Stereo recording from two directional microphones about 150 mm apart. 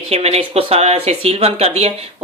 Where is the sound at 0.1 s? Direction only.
45° right (ahead or behind).